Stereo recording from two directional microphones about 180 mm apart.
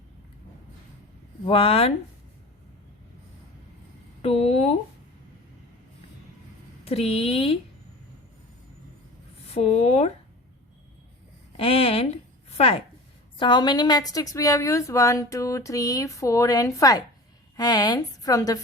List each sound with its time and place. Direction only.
1.5 s a woman's voice: 30° left (ahead or behind)
4.2 s speech: 35° left (ahead or behind)
6.8 s a woman's voice: 35° left (ahead or behind)
9.6 s a woman's voice: 35° left (ahead or behind)
11.5 s a woman's voice: 30° left (ahead or behind)